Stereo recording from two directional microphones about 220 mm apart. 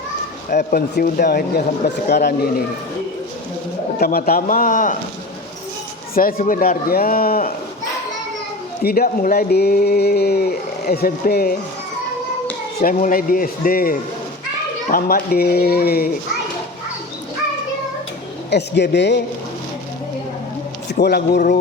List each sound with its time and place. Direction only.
0.5 s speech: 45° left (ahead or behind)
4.0 s speech: 40° left (ahead or behind)
6.1 s speech: 40° left (ahead or behind)
8.8 s speech: 45° left (ahead or behind)
12.8 s speech: 35° left (ahead or behind)
18.5 s speech: 50° left (ahead or behind)
21.0 s speech: 45° left (ahead or behind)